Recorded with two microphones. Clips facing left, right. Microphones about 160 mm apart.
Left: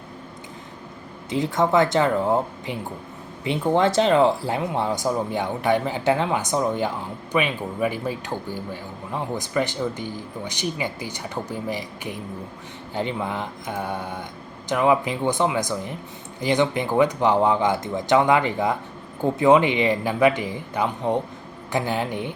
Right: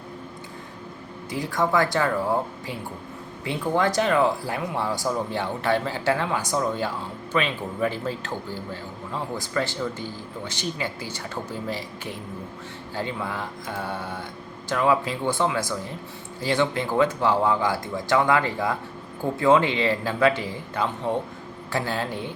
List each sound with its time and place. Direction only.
1.3 s speech: 20° left (ahead or behind)